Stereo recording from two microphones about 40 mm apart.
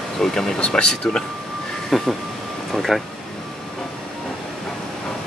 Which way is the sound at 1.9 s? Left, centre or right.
Centre.